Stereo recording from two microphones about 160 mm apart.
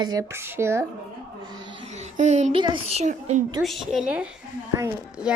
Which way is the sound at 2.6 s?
30° right (ahead or behind).